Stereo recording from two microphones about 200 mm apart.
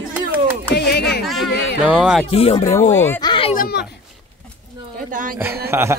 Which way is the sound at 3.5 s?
50° left (ahead or behind).